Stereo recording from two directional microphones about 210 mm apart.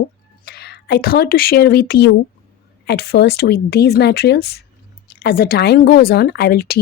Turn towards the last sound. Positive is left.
turn(degrees=45)  # may be behind; listen again after turning